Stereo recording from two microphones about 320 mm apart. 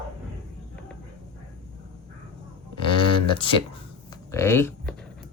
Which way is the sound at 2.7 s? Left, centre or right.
Centre.